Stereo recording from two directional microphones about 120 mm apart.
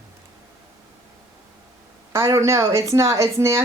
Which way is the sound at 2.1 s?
25° right (ahead or behind).